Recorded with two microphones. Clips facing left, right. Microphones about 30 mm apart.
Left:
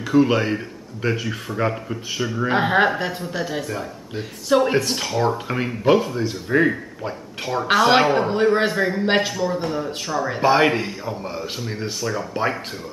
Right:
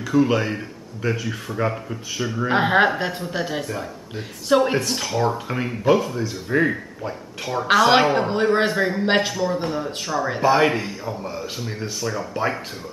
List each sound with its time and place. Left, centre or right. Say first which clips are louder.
0.0 s speech: left 2 dB; centre
4.8 s speech: left 1 dB; centre
7.6 s speech: even; centre
10.4 s speech: left 1 dB; centre